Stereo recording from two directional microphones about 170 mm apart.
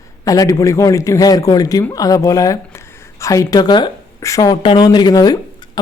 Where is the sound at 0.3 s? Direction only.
20° left (ahead or behind).